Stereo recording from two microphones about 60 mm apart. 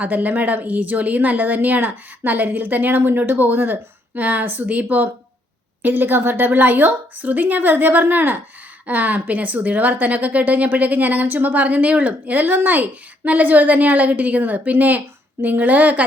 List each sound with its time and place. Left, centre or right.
0.0 s a woman's voice: right